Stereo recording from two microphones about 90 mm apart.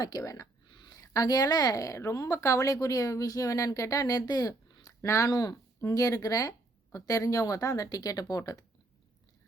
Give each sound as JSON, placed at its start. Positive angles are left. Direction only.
{"t": 0.0, "sound": "a woman's voice", "side_deg": 40}
{"t": 0.7, "sound": "a sound", "side_deg": 55}
{"t": 0.9, "sound": "a woman's voice", "side_deg": 45}